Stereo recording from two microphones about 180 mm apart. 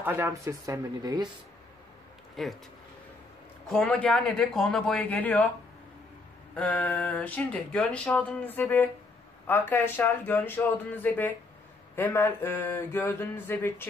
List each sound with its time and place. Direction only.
0.0 s a woman's voice: 15° right (ahead or behind)
2.4 s speech: centre (ahead or behind)
3.6 s speech: 5° left (ahead or behind)
6.5 s speech: 10° left (ahead or behind)